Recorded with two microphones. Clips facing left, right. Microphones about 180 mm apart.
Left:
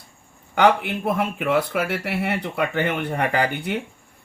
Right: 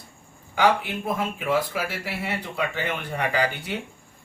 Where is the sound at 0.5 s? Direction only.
60° left (ahead or behind).